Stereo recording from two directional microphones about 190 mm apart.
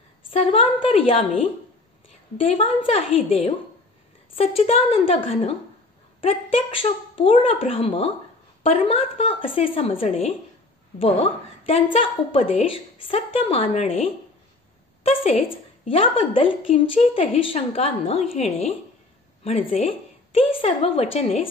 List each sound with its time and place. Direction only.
0.3 s a woman's voice: 30° left (ahead or behind)